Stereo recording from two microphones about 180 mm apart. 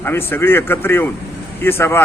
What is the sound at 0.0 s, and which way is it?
Speech, 10° left (ahead or behind).